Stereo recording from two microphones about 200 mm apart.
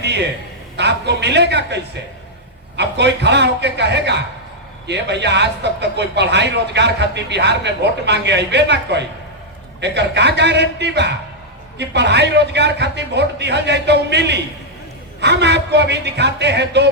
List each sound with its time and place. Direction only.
0.8 s speech: 60° right (ahead or behind)